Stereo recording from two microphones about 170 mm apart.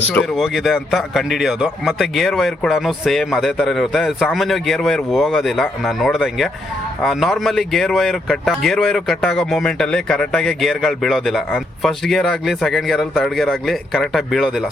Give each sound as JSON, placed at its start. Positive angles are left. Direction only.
{"t": 0.0, "sound": "speech", "side_deg": 5}